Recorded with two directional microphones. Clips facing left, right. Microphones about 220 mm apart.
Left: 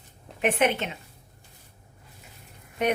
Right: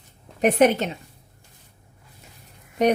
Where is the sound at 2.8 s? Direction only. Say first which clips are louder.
Right 6 dB; 35° right (ahead or behind).